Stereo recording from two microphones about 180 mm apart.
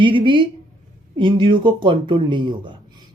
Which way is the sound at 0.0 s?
25° right (ahead or behind).